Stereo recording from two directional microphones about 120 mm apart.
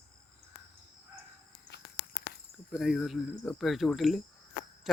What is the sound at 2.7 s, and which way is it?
Speech, centre (ahead or behind).